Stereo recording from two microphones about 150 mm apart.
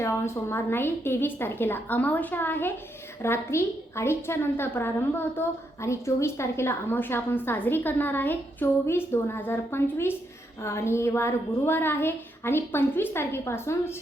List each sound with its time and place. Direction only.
0.0 s a woman's voice: 15° left (ahead or behind)